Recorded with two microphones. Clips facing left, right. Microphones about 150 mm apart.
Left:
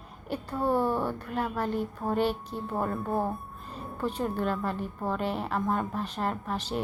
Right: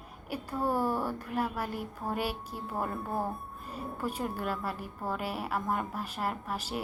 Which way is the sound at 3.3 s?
10° right (ahead or behind).